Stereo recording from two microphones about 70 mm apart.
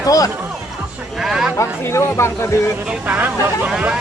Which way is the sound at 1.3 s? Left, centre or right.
Centre.